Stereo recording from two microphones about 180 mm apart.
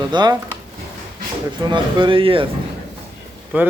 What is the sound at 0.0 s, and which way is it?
Speech, 25° right (ahead or behind).